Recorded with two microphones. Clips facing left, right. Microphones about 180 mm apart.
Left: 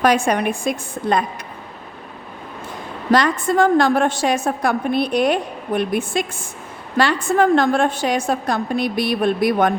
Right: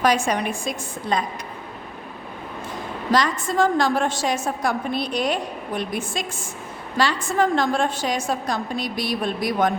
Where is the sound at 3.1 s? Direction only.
60° left (ahead or behind).